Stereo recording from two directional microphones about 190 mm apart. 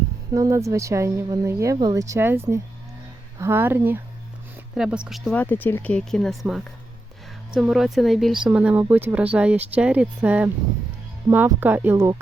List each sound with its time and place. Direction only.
0.3 s speech: 15° right (ahead or behind)